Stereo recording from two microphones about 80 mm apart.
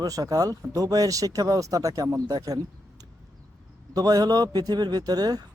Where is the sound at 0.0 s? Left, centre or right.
Right.